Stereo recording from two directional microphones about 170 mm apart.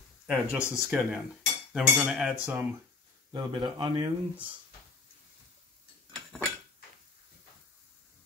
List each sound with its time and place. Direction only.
0.3 s speech: 5° right (ahead or behind)
0.8 s cutlery: 5° right (ahead or behind)
3.3 s speech: 25° right (ahead or behind)
6.1 s a sound: 5° left (ahead or behind)